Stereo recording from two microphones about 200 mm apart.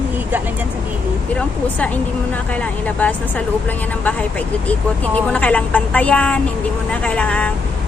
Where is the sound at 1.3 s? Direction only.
5° left (ahead or behind).